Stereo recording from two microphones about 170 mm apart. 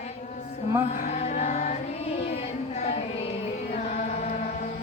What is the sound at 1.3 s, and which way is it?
Music, 45° left (ahead or behind).